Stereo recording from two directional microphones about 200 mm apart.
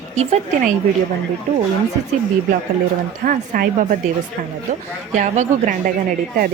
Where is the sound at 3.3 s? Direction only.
45° right (ahead or behind).